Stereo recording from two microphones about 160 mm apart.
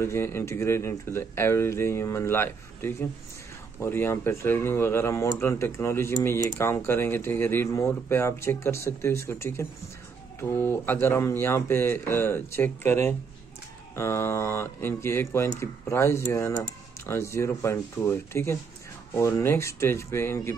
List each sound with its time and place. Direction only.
0.0 s speech: 15° left (ahead or behind)